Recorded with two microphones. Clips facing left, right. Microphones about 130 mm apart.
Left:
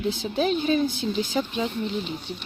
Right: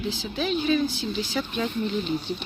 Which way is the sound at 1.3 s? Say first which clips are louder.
Right 1 dB; 20° left (ahead or behind).